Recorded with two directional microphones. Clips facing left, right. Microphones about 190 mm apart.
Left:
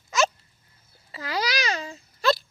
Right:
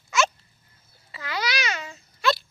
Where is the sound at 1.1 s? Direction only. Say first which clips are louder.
Left 2 dB; 35° left (ahead or behind).